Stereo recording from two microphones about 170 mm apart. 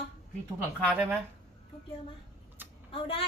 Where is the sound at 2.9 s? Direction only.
30° left (ahead or behind).